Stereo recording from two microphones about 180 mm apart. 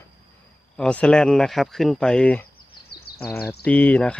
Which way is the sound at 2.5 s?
60° left (ahead or behind).